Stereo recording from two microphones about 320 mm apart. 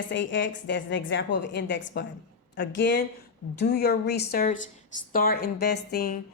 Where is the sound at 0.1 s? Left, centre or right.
Left.